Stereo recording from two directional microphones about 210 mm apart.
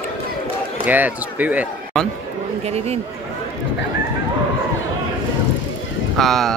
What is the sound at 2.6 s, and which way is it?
Speech, 30° right (ahead or behind).